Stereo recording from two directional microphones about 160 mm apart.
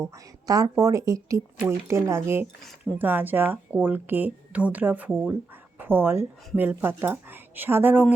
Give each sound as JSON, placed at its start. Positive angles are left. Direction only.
{"t": 0.0, "sound": "speech", "side_deg": -20}